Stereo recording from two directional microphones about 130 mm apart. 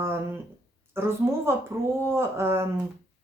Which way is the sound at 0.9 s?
20° right (ahead or behind).